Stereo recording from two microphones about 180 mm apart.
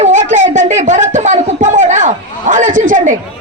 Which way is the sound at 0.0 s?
40° right (ahead or behind).